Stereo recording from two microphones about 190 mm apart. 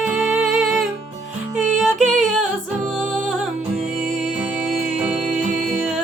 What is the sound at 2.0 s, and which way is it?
Music, 40° right (ahead or behind).